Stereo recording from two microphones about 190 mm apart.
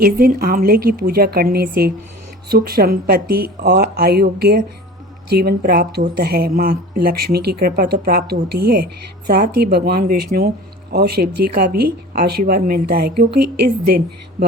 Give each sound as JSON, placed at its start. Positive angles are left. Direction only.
{"t": 0.0, "sound": "a woman's voice", "side_deg": -50}